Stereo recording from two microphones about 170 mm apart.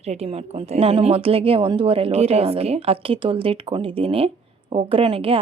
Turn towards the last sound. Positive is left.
turn(degrees=-35)  # may be behind; listen again after turning